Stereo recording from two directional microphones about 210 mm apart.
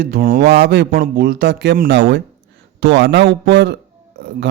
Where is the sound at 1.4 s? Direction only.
60° right (ahead or behind).